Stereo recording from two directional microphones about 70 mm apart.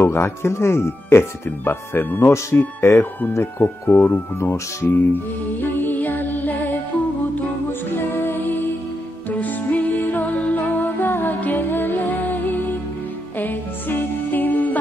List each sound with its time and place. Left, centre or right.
0.0 s speech: left
5.6 s music: left
7.9 s music: left